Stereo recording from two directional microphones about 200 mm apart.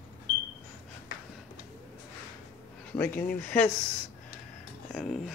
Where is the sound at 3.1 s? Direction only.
45° left (ahead or behind).